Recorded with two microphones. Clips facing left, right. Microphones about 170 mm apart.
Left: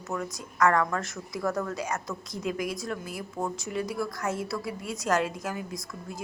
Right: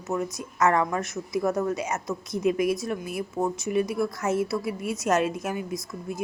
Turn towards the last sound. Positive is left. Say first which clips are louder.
# right 5 dB
turn(degrees=-25)  # may be behind; listen again after turning